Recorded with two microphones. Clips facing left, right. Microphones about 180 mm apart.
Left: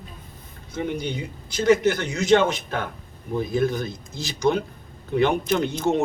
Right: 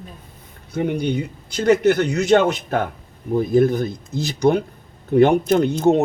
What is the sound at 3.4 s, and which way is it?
Speech, 55° right (ahead or behind).